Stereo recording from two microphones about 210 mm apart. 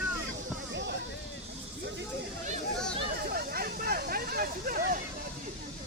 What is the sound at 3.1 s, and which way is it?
Vehicle, 45° right (ahead or behind).